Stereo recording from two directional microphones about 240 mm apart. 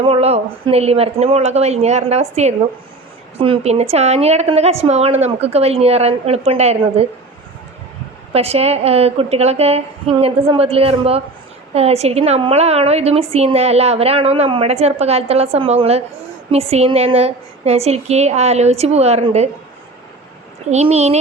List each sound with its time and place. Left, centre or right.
0.0 s a woman's voice: right
8.3 s a woman's voice: right
20.7 s a woman's voice: right